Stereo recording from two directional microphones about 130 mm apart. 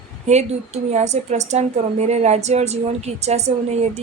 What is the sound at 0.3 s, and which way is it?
A woman's voice, 60° right (ahead or behind).